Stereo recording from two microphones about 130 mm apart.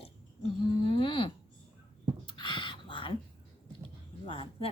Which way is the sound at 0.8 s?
40° left (ahead or behind).